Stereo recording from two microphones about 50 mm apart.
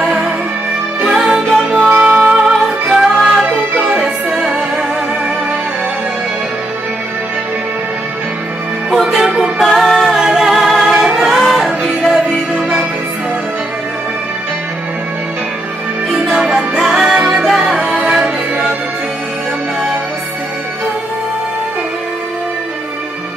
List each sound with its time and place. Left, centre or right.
0.0 s music: centre
9.3 s music: centre
9.7 s music: centre
10.0 s music: centre
16.3 s music: centre
17.0 s music: centre
17.8 s music: centre